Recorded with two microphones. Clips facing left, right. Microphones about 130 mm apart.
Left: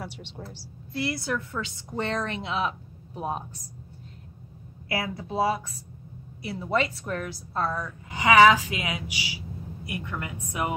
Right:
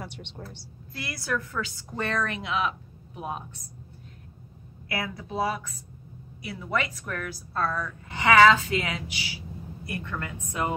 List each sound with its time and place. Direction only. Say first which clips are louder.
0.0 s a woman's voice: left 1 dB; 5° left (ahead or behind)
0.9 s a woman's voice: left 3 dB; 25° left (ahead or behind)
4.8 s a woman's voice: left 2 dB; 25° left (ahead or behind)